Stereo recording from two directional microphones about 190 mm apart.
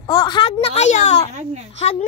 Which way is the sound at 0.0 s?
20° left (ahead or behind).